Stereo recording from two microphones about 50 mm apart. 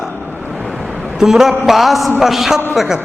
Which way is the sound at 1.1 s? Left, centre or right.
Centre.